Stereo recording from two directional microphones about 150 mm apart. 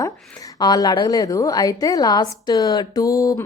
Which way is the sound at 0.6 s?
25° left (ahead or behind).